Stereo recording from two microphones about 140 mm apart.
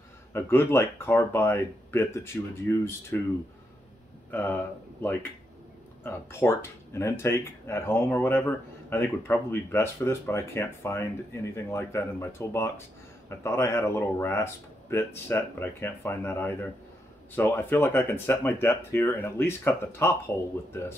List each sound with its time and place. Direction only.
0.3 s speech: 15° left (ahead or behind)
4.3 s speech: 15° left (ahead or behind)
6.0 s speech: 20° left (ahead or behind)